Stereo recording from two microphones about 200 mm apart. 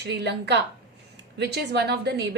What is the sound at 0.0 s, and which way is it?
A woman's voice, 60° right (ahead or behind).